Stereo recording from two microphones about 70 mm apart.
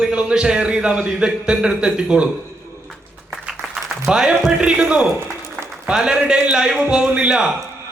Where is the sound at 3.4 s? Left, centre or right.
Centre.